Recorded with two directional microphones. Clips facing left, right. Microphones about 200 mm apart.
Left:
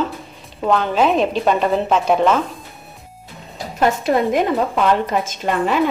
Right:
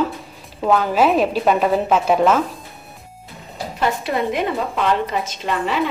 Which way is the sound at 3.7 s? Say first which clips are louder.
Left 4 dB; 45° left (ahead or behind).